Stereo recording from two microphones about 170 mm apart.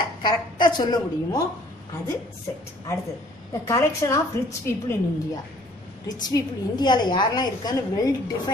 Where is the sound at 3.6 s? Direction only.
15° left (ahead or behind).